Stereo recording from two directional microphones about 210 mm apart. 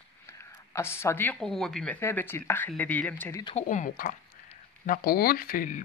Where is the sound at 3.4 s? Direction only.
35° left (ahead or behind).